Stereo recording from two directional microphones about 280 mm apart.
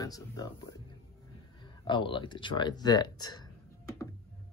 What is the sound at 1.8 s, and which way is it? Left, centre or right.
Speech, centre.